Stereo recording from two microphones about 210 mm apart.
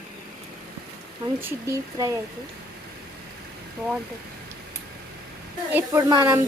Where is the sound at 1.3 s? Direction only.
10° right (ahead or behind).